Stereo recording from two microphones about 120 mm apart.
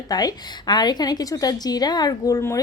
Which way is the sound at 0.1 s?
35° left (ahead or behind).